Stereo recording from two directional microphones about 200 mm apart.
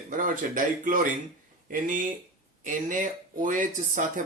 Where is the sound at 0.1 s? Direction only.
40° right (ahead or behind).